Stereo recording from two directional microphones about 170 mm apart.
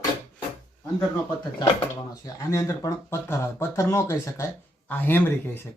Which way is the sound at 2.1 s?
20° left (ahead or behind).